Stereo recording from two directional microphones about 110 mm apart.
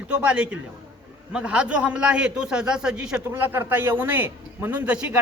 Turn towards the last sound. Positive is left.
turn(degrees=-10)  # may be behind; listen again after turning